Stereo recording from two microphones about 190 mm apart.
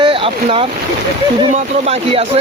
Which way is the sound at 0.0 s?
25° right (ahead or behind).